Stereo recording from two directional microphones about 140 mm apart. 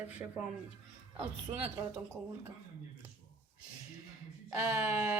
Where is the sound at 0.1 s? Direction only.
10° right (ahead or behind).